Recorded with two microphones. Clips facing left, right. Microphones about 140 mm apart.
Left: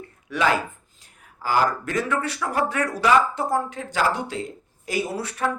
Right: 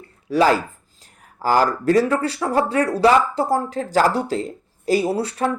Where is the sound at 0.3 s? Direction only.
35° right (ahead or behind).